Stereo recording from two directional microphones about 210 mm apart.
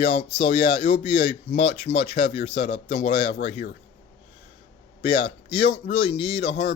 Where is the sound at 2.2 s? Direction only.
50° left (ahead or behind).